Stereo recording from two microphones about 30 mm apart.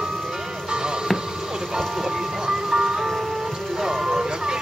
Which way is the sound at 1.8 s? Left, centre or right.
Centre.